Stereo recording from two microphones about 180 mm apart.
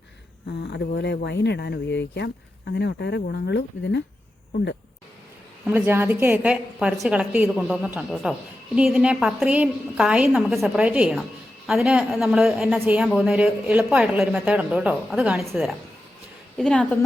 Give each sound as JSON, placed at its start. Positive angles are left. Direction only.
{"t": 0.6, "sound": "speech", "side_deg": 70}
{"t": 5.6, "sound": "a woman's voice", "side_deg": -10}